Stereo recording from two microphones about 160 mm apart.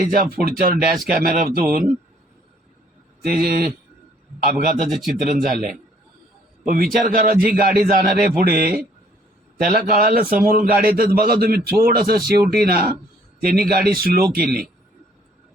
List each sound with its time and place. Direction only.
0.0 s a man's voice: 60° right (ahead or behind)
3.2 s a man's voice: 70° right (ahead or behind)
4.9 s a man's voice: centre (ahead or behind)
6.7 s a man's voice: 65° right (ahead or behind)